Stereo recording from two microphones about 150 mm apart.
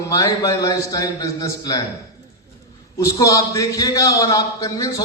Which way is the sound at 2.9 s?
20° left (ahead or behind).